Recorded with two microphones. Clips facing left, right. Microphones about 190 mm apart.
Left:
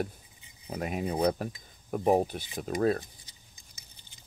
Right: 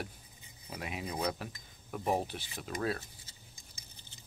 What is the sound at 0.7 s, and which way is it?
Speech, 45° left (ahead or behind).